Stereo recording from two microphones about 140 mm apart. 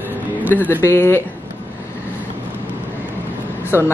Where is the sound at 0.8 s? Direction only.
15° left (ahead or behind).